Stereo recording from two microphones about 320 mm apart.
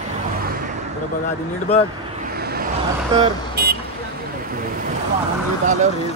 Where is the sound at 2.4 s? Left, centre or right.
Right.